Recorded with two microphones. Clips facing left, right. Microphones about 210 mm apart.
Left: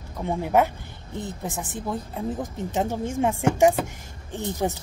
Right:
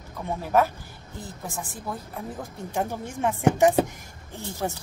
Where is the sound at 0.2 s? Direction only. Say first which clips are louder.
Left 2 dB; 20° left (ahead or behind).